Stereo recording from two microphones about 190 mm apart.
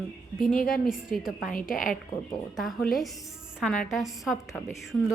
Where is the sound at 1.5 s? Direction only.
45° left (ahead or behind).